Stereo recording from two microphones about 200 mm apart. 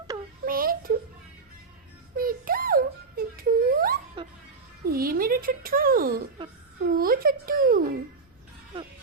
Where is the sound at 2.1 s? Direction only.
45° right (ahead or behind).